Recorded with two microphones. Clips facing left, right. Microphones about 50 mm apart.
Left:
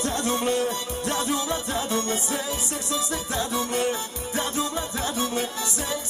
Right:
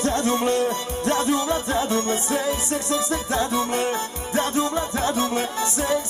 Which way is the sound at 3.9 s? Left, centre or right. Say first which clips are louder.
Right 4 dB; right.